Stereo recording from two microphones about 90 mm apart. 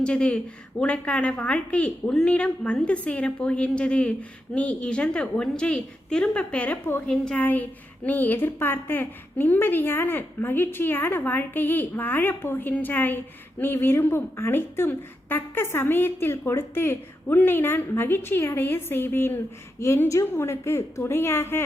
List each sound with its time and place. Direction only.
0.0 s a woman's voice: 10° left (ahead or behind); by 21.6 s 25° left (ahead or behind)